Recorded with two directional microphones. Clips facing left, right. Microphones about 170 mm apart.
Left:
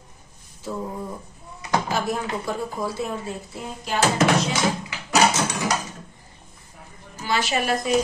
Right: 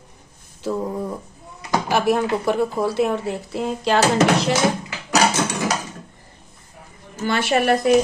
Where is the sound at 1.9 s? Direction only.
70° right (ahead or behind).